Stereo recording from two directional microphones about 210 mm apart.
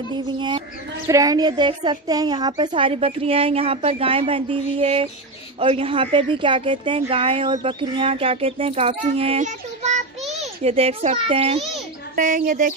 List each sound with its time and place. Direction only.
1.0 s a woman's voice: 15° right (ahead or behind)
12.2 s speech: 40° right (ahead or behind)